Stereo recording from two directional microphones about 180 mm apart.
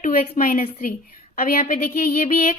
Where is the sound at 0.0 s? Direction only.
50° left (ahead or behind).